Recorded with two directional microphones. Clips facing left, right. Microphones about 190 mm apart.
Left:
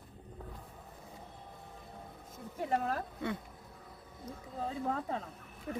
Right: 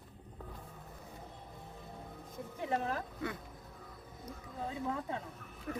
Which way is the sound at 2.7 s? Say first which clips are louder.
Left 2 dB; 40° left (ahead or behind).